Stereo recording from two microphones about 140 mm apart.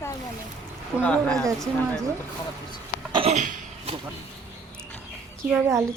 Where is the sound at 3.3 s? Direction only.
60° right (ahead or behind).